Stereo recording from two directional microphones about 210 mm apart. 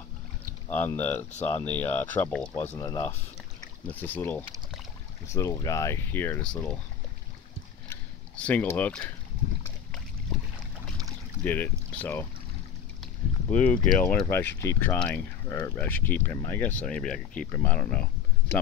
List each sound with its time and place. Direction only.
0.7 s speech: 10° left (ahead or behind)
1.3 s speech: 30° left (ahead or behind)
1.6 s speech: 10° left (ahead or behind)
7.9 s a sound: 5° left (ahead or behind)
11.4 s speech: 10° left (ahead or behind)
13.0 s boat: 5° left (ahead or behind)
14.2 s speech: 10° left (ahead or behind)